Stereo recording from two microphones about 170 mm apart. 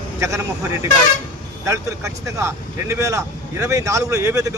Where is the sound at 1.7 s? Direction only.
15° right (ahead or behind).